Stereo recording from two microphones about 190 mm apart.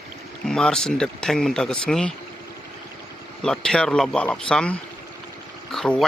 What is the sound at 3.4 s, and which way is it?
Speech, 5° left (ahead or behind).